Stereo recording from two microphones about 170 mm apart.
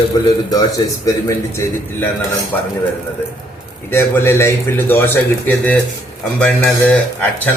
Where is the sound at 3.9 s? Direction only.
15° left (ahead or behind).